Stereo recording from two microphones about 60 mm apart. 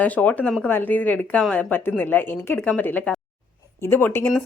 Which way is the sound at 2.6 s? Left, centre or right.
Left.